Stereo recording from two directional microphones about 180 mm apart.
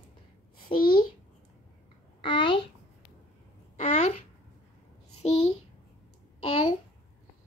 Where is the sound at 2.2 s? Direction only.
30° left (ahead or behind).